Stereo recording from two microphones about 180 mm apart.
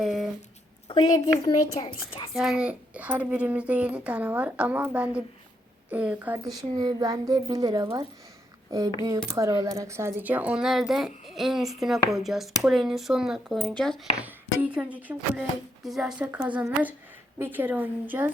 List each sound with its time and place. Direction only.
0.0 s speech: centre (ahead or behind)
0.9 s a woman's voice: 25° left (ahead or behind)
2.3 s a child's voice: 5° right (ahead or behind); by 8.0 s 20° right (ahead or behind)
9.3 s speech: 20° right (ahead or behind); by 14.1 s centre (ahead or behind)
14.2 s a child's voice: 10° right (ahead or behind)